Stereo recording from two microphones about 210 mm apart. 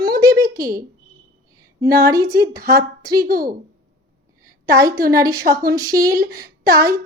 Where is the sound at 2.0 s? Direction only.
15° right (ahead or behind).